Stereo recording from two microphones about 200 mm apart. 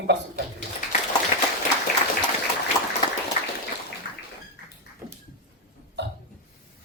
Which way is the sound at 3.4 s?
25° left (ahead or behind).